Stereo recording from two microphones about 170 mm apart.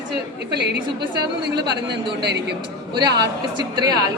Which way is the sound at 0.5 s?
80° right.